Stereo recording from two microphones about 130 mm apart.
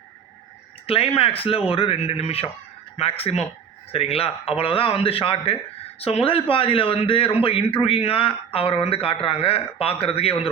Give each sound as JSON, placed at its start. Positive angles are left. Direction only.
{"t": 0.9, "sound": "speech", "side_deg": 45}